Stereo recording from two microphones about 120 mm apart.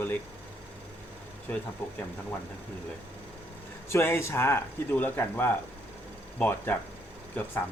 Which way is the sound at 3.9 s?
20° left (ahead or behind).